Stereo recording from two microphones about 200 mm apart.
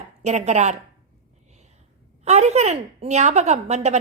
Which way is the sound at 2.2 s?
35° right (ahead or behind).